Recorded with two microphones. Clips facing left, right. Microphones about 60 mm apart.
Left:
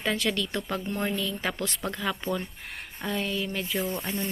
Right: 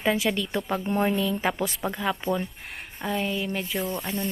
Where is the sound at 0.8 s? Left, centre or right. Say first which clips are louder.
Right 5 dB; right.